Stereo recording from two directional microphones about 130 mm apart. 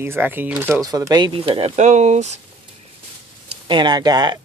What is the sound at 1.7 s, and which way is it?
Speech, 65° right (ahead or behind).